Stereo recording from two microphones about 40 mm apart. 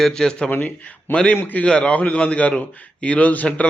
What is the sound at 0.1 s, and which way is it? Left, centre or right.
Speech, centre.